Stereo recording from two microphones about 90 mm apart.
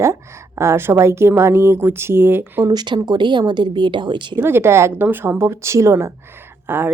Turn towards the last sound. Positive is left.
turn(degrees=-25)  # may be behind; listen again after turning